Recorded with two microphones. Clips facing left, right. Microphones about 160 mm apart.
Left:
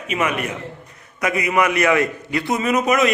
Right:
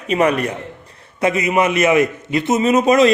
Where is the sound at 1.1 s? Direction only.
25° right (ahead or behind).